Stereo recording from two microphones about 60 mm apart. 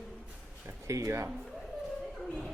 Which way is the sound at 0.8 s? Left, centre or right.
Right.